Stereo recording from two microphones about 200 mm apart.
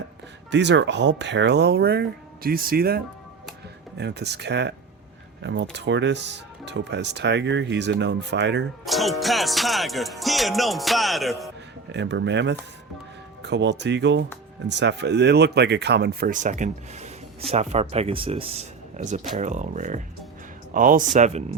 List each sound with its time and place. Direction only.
0.5 s speech: 60° right (ahead or behind)
8.8 s music: centre (ahead or behind)
11.9 s speech: 60° right (ahead or behind); by 21.4 s 35° right (ahead or behind)